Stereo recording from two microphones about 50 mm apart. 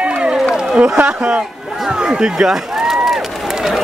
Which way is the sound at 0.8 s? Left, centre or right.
Right.